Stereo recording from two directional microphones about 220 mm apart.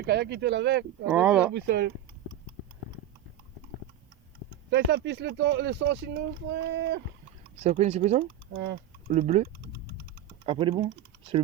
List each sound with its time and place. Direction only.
0.0 s speech: 50° right (ahead or behind)
1.0 s speech: 5° right (ahead or behind)
1.5 s speech: 50° right (ahead or behind)
4.7 s speech: 50° right (ahead or behind)
7.6 s speech: 30° right (ahead or behind)
8.5 s speech: 55° right (ahead or behind)
9.0 s speech: 30° right (ahead or behind)